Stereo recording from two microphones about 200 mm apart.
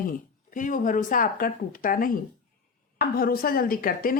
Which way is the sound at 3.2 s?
50° left (ahead or behind).